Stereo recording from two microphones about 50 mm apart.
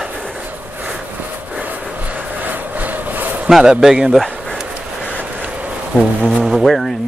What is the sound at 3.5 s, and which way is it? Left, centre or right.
Speech, centre.